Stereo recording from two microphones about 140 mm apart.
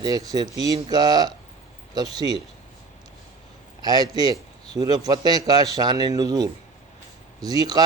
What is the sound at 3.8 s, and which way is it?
A man's voice, 30° right (ahead or behind).